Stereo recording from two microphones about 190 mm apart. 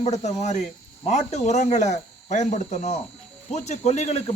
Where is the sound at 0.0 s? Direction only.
35° left (ahead or behind).